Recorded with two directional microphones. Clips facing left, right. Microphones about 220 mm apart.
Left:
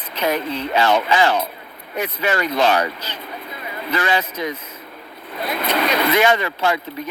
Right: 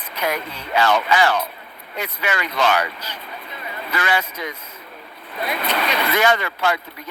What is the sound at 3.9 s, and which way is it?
Speech, 30° left (ahead or behind).